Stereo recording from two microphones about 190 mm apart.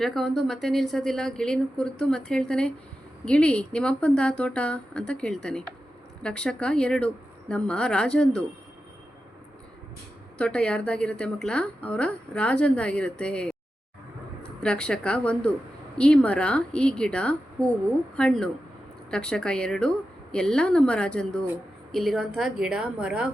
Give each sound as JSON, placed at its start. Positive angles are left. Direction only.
{"t": 0.0, "sound": "a woman's voice", "side_deg": 0}
{"t": 10.3, "sound": "a woman's voice", "side_deg": 5}
{"t": 14.6, "sound": "a woman's voice", "side_deg": 5}
{"t": 21.4, "sound": "a woman's voice", "side_deg": -10}